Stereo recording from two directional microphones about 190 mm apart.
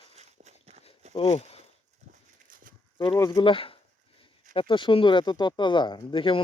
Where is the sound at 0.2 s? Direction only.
35° right (ahead or behind).